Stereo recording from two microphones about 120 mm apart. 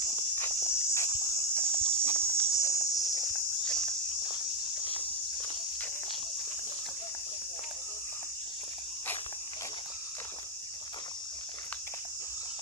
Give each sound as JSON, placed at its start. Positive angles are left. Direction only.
{"t": 0.4, "sound": "insect", "side_deg": 20}
{"t": 1.6, "sound": "a sound", "side_deg": 40}
{"t": 3.6, "sound": "walk", "side_deg": 5}